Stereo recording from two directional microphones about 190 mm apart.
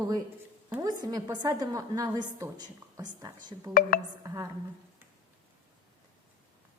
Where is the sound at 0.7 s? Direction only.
15° right (ahead or behind).